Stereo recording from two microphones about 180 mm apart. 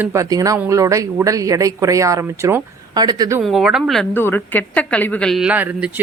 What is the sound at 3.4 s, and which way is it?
A woman's voice, centre (ahead or behind).